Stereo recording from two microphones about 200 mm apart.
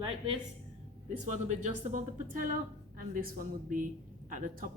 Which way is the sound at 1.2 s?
35° right (ahead or behind).